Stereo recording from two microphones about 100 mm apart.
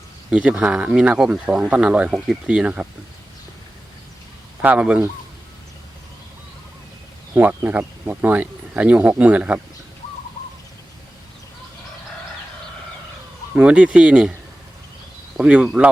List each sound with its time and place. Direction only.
0.3 s speech: 10° right (ahead or behind)
4.6 s speech: 15° right (ahead or behind)
7.3 s speech: 20° right (ahead or behind)
13.6 s speech: 10° right (ahead or behind)
15.4 s speech: 10° right (ahead or behind)